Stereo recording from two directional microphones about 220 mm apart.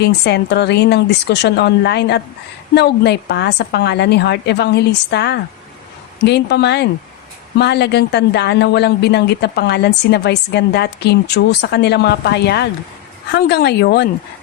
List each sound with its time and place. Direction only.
0.0 s a woman's voice: 50° left (ahead or behind)